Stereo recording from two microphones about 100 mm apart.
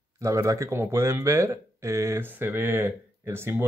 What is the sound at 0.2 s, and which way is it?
Speech, 30° right (ahead or behind).